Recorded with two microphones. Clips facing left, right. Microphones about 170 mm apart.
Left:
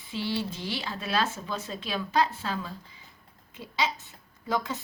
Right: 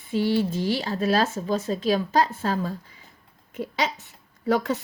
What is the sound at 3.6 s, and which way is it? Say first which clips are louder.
Speech: right 4 dB; 65° right (ahead or behind).